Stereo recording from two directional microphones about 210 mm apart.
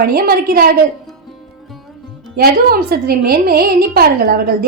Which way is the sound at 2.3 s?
45° right (ahead or behind).